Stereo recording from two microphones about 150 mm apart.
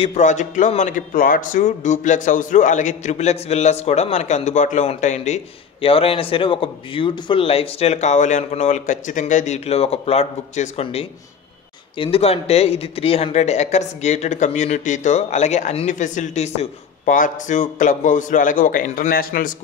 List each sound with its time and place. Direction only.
0.0 s a man's voice: 50° left (ahead or behind); by 19.5 s 70° left (ahead or behind)